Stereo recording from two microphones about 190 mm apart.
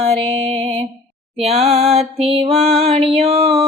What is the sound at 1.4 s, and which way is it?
Music, 35° right (ahead or behind).